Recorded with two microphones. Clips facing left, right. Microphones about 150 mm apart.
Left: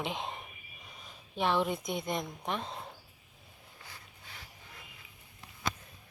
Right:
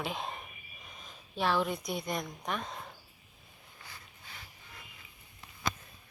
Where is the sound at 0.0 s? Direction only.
20° left (ahead or behind).